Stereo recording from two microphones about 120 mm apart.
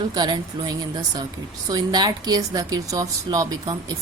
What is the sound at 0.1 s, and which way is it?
A woman's voice, 35° right (ahead or behind).